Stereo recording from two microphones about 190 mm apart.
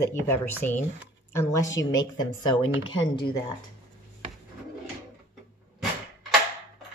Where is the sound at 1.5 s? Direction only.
15° left (ahead or behind).